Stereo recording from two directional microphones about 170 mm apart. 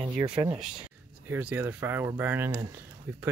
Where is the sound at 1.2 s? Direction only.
10° right (ahead or behind).